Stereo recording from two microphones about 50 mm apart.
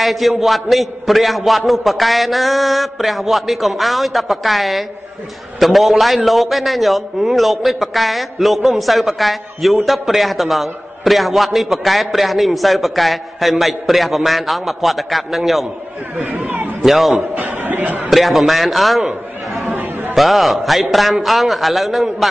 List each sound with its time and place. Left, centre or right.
0.0 s a man's voice: centre
16.2 s speech: right
16.8 s a man's voice: centre
17.4 s speech: right
18.1 s a man's voice: centre
19.7 s chatter: right
20.2 s a man's voice: centre